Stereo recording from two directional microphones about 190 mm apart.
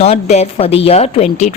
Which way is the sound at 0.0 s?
35° left (ahead or behind).